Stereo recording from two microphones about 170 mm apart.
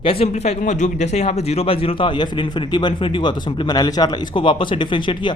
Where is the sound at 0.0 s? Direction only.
35° left (ahead or behind).